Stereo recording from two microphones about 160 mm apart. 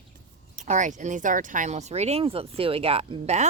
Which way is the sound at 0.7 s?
50° right (ahead or behind).